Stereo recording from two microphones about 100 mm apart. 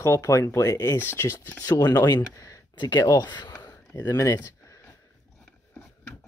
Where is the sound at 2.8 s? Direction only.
45° left (ahead or behind).